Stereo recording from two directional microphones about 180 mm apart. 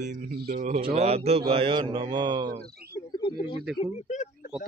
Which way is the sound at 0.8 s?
35° right (ahead or behind).